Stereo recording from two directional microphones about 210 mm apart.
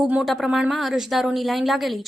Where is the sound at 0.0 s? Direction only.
5° right (ahead or behind).